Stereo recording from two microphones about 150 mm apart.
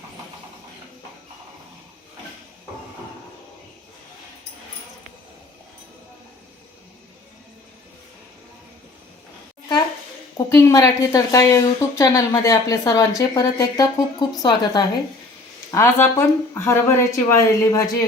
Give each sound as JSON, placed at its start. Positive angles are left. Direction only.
{"t": 10.3, "sound": "a woman's voice", "side_deg": 20}
{"t": 15.7, "sound": "a woman's voice", "side_deg": 15}